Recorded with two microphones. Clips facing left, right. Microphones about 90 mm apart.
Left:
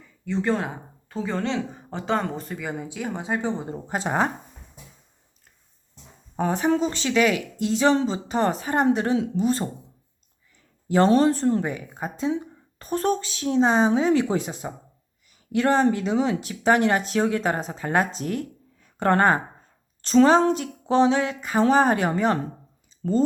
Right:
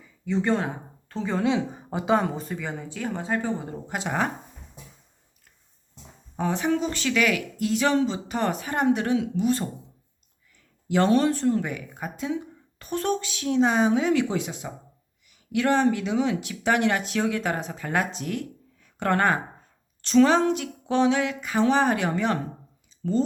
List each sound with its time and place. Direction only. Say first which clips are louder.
0.3 s speech: even; centre (ahead or behind)
1.5 s speech: right 3 dB; 10° right (ahead or behind); by 3.8 s 20° left (ahead or behind)
3.8 s speech: left 3 dB; 35° left (ahead or behind)
6.3 s speech: left 3 dB; 40° left (ahead or behind)
10.8 s speech: left 3 dB; 35° left (ahead or behind)